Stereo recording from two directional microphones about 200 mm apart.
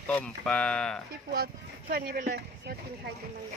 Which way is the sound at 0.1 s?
5° left (ahead or behind).